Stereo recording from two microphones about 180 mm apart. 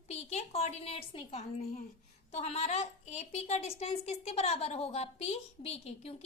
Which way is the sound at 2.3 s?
35° left (ahead or behind).